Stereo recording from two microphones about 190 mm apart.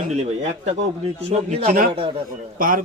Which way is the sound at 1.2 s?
35° right (ahead or behind).